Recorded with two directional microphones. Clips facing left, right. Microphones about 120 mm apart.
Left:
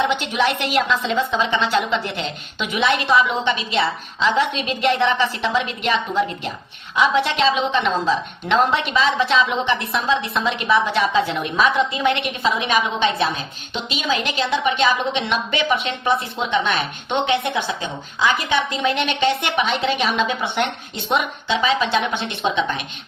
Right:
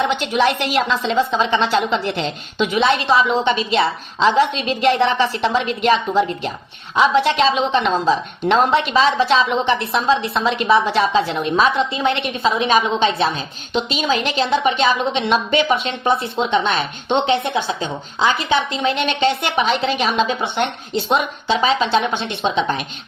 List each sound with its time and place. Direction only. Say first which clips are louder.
0.1 s a woman's voice: right 3 dB; 40° right (ahead or behind)
20.2 s a woman's voice: right 1 dB; 30° right (ahead or behind)